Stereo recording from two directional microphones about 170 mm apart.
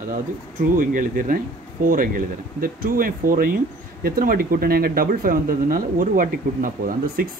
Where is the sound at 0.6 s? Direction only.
55° right (ahead or behind).